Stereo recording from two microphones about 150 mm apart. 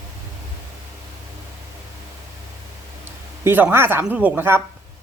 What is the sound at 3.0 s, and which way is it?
Speech, 15° right (ahead or behind).